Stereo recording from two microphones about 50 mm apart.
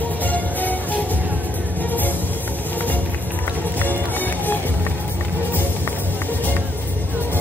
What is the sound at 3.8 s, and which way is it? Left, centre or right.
Music, left.